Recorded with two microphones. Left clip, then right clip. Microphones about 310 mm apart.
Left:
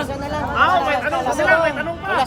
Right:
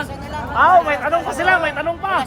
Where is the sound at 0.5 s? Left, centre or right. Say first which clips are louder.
Right 4 dB; centre.